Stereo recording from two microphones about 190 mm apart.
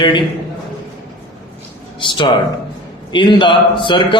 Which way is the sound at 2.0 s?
25° left (ahead or behind).